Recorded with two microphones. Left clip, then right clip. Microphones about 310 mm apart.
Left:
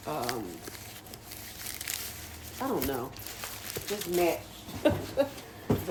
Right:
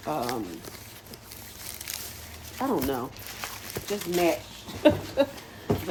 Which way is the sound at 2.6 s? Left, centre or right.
Right.